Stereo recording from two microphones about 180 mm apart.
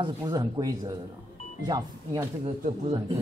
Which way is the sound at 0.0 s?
25° right (ahead or behind).